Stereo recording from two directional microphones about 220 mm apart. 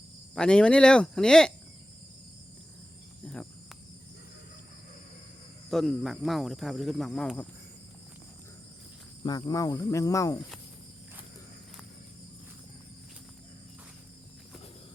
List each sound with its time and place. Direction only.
0.3 s speech: 5° left (ahead or behind)
3.2 s speech: 5° left (ahead or behind)
5.7 s speech: centre (ahead or behind)
9.2 s speech: 15° left (ahead or behind)